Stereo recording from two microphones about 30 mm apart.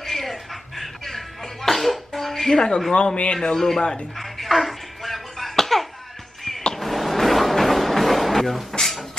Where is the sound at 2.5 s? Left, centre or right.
Left.